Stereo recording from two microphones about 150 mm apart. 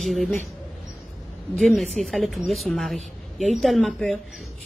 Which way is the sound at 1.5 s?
Centre (ahead or behind).